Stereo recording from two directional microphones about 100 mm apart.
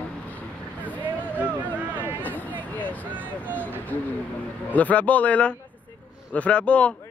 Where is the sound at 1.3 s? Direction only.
20° right (ahead or behind).